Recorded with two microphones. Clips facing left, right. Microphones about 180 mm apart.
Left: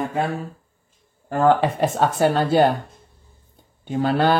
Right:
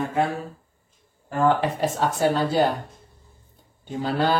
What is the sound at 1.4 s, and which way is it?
Speech, 60° left (ahead or behind).